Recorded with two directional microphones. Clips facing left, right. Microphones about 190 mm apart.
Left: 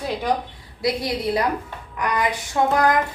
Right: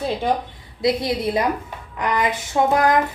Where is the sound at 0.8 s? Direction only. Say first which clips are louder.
Right 3 dB; 25° right (ahead or behind).